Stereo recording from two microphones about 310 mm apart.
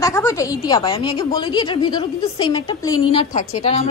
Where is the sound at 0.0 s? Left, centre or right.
Centre.